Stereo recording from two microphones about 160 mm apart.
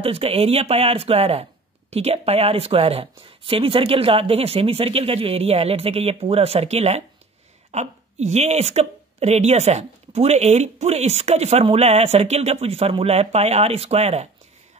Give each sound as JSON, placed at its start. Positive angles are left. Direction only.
{"t": 0.0, "sound": "speech", "side_deg": -35}